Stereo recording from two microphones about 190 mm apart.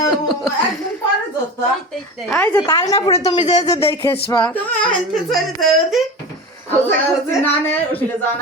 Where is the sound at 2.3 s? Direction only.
10° left (ahead or behind).